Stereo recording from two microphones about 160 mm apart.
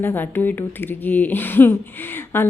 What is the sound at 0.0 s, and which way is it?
A woman's voice, 10° left (ahead or behind).